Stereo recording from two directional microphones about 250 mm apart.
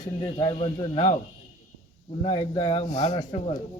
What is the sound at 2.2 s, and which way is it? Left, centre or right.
Speech, left.